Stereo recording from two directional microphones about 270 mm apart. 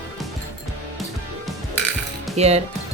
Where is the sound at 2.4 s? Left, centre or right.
Right.